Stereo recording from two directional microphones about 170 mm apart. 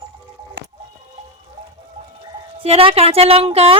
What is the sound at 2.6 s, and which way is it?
Speech, 35° right (ahead or behind).